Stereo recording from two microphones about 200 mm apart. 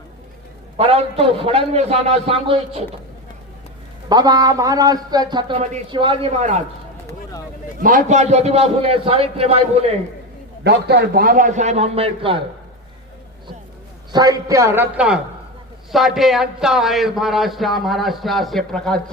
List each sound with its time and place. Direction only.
0.8 s a man's voice: 30° right (ahead or behind)
4.1 s a man's voice: 20° right (ahead or behind)
7.8 s a man's voice: 40° right (ahead or behind)
10.6 s a man's voice: 55° right (ahead or behind); by 12.4 s 25° right (ahead or behind)
14.1 s a man's voice: 20° right (ahead or behind); by 19.1 s 5° left (ahead or behind)